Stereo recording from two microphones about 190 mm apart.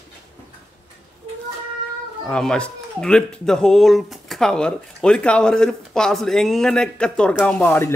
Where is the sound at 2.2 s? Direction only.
5° left (ahead or behind).